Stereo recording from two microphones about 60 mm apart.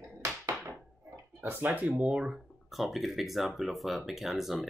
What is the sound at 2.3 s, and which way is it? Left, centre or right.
Speech, centre.